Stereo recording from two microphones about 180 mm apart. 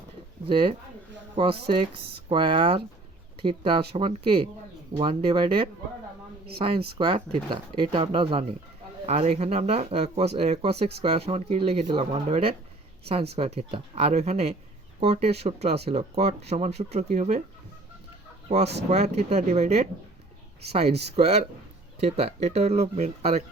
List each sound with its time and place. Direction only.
0.4 s speech: 30° right (ahead or behind)
18.9 s speech: 40° right (ahead or behind)
21.2 s speech: 35° right (ahead or behind)